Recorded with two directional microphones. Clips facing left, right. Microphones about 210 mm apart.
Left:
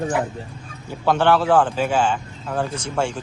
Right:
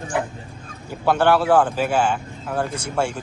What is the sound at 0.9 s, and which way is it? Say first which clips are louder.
A man's voice: even; 10° right (ahead or behind).